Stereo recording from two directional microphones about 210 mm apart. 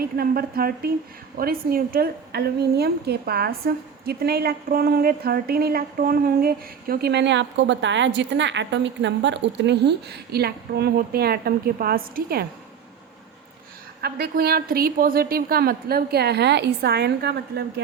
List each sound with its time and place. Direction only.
0.0 s a woman's voice: 45° right (ahead or behind)
14.0 s a woman's voice: 45° right (ahead or behind)